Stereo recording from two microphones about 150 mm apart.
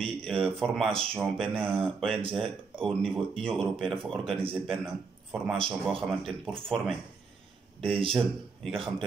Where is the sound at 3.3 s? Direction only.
5° left (ahead or behind).